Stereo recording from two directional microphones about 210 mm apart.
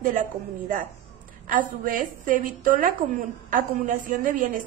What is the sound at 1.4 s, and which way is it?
A woman's voice, 40° right (ahead or behind).